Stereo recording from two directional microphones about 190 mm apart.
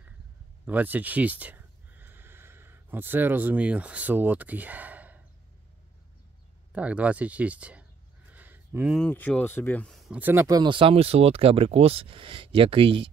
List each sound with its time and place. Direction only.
0.7 s speech: 10° right (ahead or behind)
6.7 s speech: 5° right (ahead or behind)
8.3 s a sound: 10° right (ahead or behind)
8.9 s speech: 5° left (ahead or behind); by 13.1 s 25° right (ahead or behind)